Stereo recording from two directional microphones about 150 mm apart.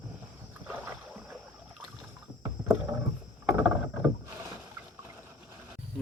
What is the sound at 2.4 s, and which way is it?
Rowboat, 15° right (ahead or behind).